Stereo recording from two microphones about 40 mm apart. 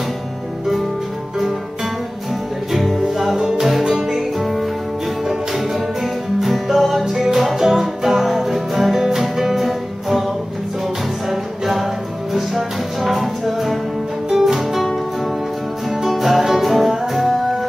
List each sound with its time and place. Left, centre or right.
2.7 s music: centre
4.4 s music: centre
5.2 s music: centre
11.2 s music: centre
15.9 s music: centre